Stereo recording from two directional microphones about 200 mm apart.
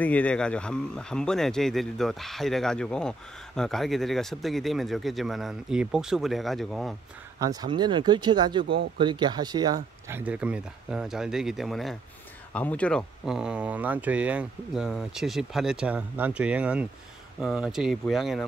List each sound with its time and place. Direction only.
0.0 s speech: 5° left (ahead or behind)
7.3 s speech: 20° right (ahead or behind); by 18.4 s centre (ahead or behind)